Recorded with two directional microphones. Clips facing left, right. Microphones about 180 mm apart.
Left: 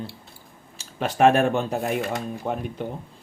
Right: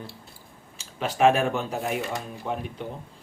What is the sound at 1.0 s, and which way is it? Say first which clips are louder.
Speech: left 3 dB; 50° left (ahead or behind).